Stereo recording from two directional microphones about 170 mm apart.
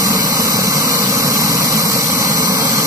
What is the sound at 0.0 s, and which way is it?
Vehicle, 20° right (ahead or behind).